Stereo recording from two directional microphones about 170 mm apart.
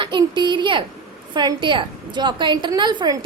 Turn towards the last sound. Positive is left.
turn(degrees=-25)  # may be behind; listen again after turning